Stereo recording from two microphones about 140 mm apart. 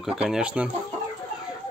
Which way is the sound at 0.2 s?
5° right (ahead or behind).